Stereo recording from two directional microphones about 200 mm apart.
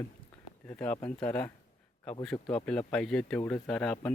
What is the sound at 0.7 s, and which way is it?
Speech, 5° left (ahead or behind).